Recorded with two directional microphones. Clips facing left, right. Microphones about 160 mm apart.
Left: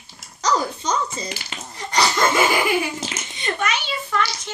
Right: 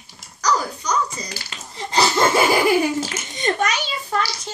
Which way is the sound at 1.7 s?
25° right (ahead or behind).